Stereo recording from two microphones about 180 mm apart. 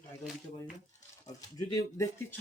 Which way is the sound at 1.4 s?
20° left (ahead or behind).